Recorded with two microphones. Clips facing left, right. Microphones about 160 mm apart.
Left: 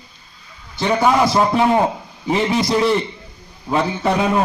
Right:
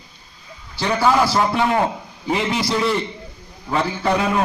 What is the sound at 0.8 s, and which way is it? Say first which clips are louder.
A man's voice: left 2 dB; 20° left (ahead or behind).